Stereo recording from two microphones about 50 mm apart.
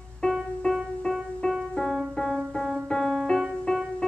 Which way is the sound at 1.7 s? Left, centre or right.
Centre.